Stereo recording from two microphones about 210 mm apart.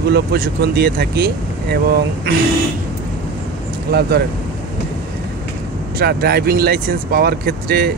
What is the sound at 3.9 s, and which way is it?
Speech, 50° right (ahead or behind).